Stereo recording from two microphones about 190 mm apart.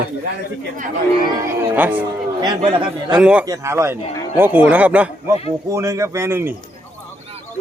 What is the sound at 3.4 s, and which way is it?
Speech, 15° right (ahead or behind).